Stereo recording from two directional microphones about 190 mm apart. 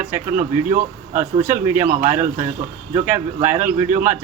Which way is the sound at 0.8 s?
40° right (ahead or behind).